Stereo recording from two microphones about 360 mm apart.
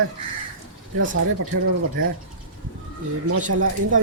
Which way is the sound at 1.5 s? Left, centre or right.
Right.